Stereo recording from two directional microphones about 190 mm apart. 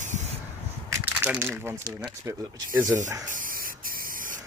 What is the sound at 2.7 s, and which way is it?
Rub, 15° right (ahead or behind).